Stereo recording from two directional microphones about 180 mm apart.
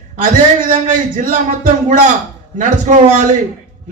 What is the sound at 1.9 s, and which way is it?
A man's voice, 40° right (ahead or behind).